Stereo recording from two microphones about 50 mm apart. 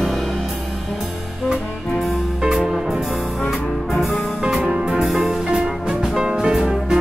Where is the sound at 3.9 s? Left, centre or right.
Centre.